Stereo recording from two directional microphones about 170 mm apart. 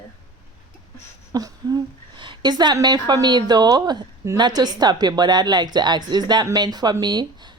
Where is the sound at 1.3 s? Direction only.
20° right (ahead or behind).